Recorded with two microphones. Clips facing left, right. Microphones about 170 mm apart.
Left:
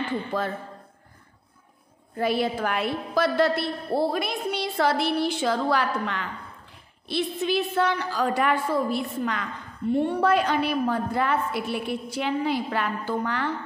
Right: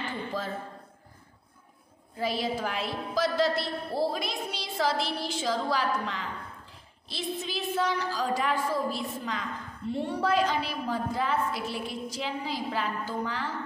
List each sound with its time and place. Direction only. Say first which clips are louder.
0.3 s a woman's voice: left 7 dB; 65° left (ahead or behind)
2.1 s a woman's voice: left 5 dB; 60° left (ahead or behind)